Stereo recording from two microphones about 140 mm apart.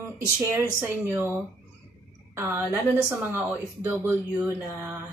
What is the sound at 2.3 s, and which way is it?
A woman's voice, 20° right (ahead or behind).